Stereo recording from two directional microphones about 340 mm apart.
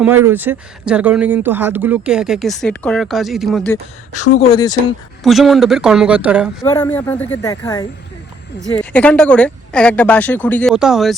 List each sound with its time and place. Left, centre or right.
0.3 s speech: centre
4.1 s speech: left
4.4 s speech: centre
5.2 s speech: centre
6.6 s speech: centre